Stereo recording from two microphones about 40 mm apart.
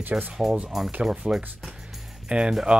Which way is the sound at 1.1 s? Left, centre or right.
Centre.